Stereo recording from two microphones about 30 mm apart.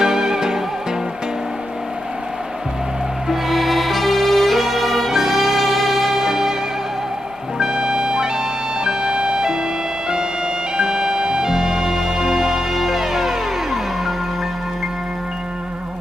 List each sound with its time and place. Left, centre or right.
0.0 s music: centre
3.5 s music: centre
7.6 s music: right; by 14.1 s centre